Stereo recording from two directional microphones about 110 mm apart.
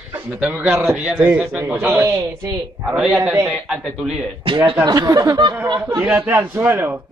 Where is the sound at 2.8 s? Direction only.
10° right (ahead or behind).